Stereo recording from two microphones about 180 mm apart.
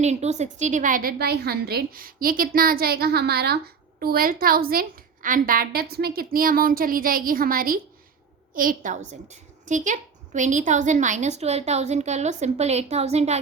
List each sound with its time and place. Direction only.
0.0 s a woman's voice: 40° right (ahead or behind)